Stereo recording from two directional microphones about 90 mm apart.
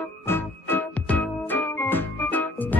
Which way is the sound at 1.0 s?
15° left (ahead or behind).